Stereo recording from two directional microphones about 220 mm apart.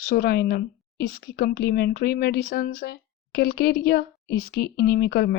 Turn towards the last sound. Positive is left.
turn(degrees=45)  # may be behind; listen again after turning